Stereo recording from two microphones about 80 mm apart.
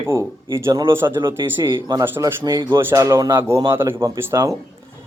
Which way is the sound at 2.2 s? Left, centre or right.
Right.